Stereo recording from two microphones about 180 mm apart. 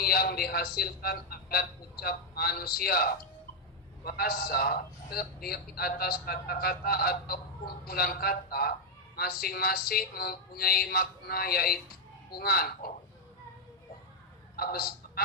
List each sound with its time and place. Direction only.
0.0 s a man's voice: 60° left (ahead or behind)
14.5 s a man's voice: 55° left (ahead or behind)